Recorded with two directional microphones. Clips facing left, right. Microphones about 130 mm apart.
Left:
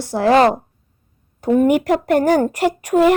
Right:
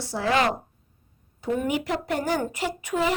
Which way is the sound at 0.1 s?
55° left (ahead or behind).